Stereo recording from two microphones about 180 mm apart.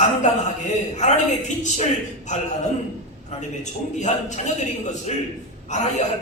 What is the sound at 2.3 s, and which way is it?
A man's voice, 40° left (ahead or behind).